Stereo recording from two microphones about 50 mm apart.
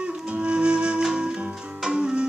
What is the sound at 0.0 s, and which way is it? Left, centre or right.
Music, right.